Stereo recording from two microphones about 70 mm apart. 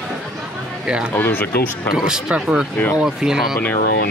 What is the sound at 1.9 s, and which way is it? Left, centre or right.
Speech, centre.